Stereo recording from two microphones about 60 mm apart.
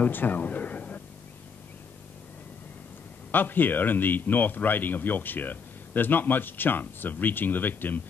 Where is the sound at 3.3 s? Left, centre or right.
Left.